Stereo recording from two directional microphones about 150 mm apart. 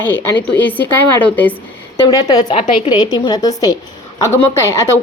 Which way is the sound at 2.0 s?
30° left (ahead or behind).